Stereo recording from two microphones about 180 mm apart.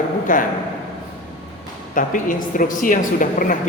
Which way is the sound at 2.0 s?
50° left (ahead or behind).